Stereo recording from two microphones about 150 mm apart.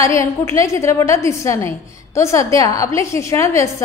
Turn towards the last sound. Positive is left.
turn(degrees=20)  # may be behind; listen again after turning